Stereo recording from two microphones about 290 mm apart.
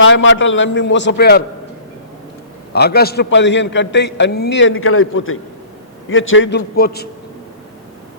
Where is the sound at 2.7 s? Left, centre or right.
Left.